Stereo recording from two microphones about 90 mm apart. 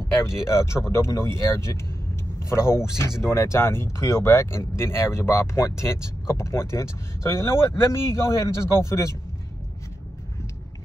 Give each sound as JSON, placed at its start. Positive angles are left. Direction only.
{"t": 0.5, "sound": "speech", "side_deg": 30}